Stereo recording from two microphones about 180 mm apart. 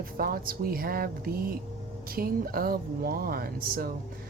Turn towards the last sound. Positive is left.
turn(degrees=-55)  # may be behind; listen again after turning